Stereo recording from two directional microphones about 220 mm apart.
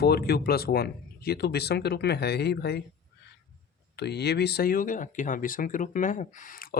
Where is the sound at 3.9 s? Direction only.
50° left (ahead or behind).